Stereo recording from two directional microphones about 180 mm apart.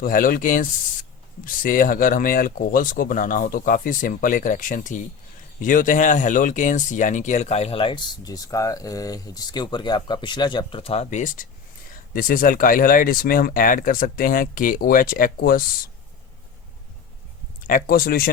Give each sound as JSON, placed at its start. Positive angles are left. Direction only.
{"t": 0.0, "sound": "speech", "side_deg": 50}
{"t": 17.7, "sound": "speech", "side_deg": 55}